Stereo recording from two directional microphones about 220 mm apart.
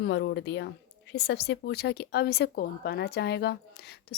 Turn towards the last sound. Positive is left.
turn(degrees=45)  # may be behind; listen again after turning